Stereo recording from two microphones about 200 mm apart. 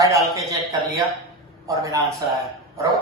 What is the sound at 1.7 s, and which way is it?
Speech, 15° right (ahead or behind).